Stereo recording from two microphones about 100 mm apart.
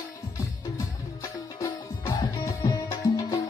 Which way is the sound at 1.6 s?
35° left (ahead or behind).